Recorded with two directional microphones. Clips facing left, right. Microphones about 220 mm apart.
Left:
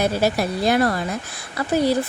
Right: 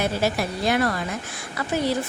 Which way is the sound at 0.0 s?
40° left (ahead or behind).